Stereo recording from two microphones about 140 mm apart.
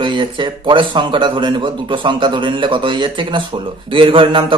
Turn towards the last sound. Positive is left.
turn(degrees=-40)  # may be behind; listen again after turning